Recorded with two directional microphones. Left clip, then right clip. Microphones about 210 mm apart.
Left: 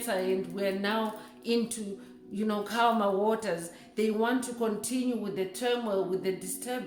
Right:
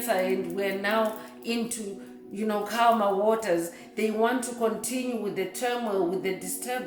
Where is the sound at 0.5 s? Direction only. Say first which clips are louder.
Right 4 dB; 30° left (ahead or behind).